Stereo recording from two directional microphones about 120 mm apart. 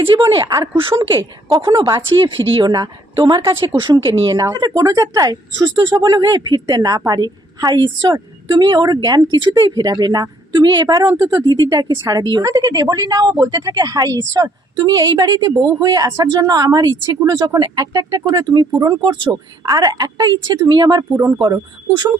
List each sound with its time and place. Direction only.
0.1 s speech: 40° right (ahead or behind)